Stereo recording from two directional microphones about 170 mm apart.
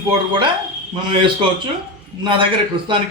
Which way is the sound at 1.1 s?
30° right (ahead or behind).